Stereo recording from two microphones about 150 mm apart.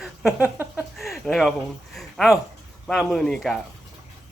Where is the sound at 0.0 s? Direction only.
5° right (ahead or behind).